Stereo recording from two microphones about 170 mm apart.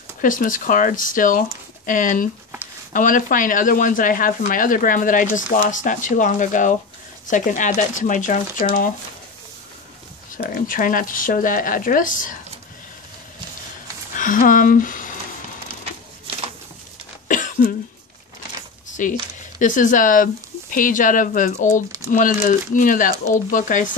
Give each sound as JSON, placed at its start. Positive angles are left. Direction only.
{"t": 0.2, "sound": "speech", "side_deg": 50}
{"t": 10.3, "sound": "speech", "side_deg": 55}
{"t": 14.1, "sound": "speech", "side_deg": 50}
{"t": 17.3, "sound": "cough", "side_deg": 50}
{"t": 19.0, "sound": "speech", "side_deg": 50}